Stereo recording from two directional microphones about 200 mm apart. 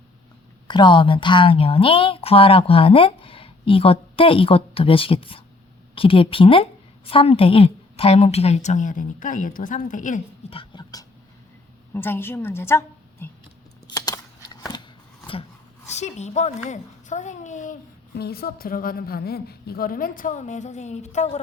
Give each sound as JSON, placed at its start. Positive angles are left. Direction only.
{"t": 0.7, "sound": "a woman's voice", "side_deg": 25}
{"t": 10.6, "sound": "beatboxing", "side_deg": 20}
{"t": 11.9, "sound": "a woman's voice", "side_deg": 10}
{"t": 13.8, "sound": "a sound", "side_deg": 20}
{"t": 15.9, "sound": "a woman's voice", "side_deg": 35}
{"t": 18.1, "sound": "a woman's voice", "side_deg": 50}